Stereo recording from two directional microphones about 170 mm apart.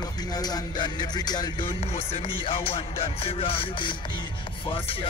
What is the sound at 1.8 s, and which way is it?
Speech, 40° left (ahead or behind).